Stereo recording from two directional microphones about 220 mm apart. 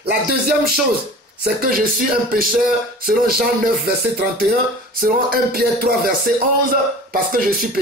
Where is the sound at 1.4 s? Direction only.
40° right (ahead or behind).